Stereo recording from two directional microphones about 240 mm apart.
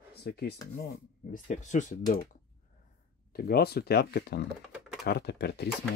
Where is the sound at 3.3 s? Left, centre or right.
Left.